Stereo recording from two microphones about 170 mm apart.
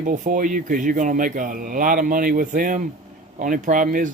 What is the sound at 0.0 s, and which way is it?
Speech, 50° right (ahead or behind).